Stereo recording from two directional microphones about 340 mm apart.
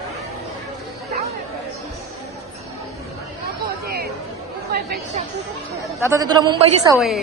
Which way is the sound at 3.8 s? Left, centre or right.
Right.